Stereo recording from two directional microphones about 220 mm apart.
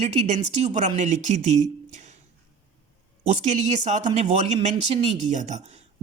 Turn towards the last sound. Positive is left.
turn(degrees=-30)  # may be behind; listen again after turning